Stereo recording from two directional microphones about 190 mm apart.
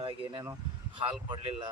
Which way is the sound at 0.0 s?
25° right (ahead or behind).